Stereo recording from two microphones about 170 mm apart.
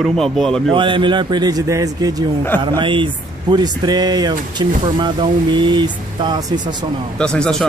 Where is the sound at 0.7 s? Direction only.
30° right (ahead or behind).